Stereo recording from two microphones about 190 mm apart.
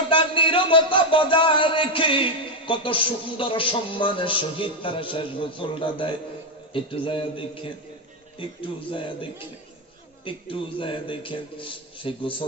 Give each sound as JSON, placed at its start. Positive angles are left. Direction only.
{"t": 0.1, "sound": "speech", "side_deg": 25}